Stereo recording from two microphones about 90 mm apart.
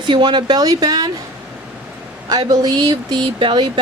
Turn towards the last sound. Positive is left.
turn(degrees=-60)  # may be behind; listen again after turning